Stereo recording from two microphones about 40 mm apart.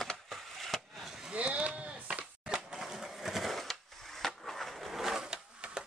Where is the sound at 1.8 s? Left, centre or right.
Right.